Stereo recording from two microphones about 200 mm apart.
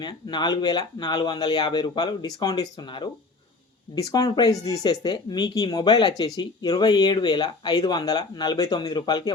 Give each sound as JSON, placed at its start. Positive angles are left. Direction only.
{"t": 0.0, "sound": "speech", "side_deg": 20}